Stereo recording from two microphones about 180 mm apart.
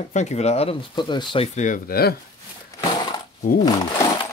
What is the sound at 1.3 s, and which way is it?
Speech, 35° left (ahead or behind).